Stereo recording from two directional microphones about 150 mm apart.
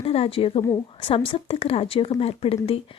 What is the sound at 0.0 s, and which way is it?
A woman's voice, 40° left (ahead or behind).